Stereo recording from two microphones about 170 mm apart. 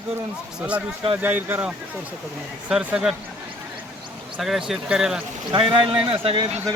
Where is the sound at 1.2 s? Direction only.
10° right (ahead or behind).